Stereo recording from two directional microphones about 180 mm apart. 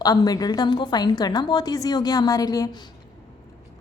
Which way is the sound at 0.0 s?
20° left (ahead or behind).